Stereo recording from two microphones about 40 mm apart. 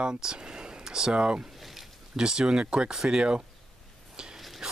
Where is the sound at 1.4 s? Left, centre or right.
Centre.